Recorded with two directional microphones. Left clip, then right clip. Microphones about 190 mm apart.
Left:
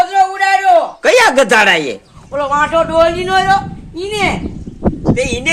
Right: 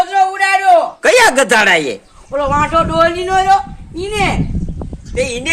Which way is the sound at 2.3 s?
15° right (ahead or behind).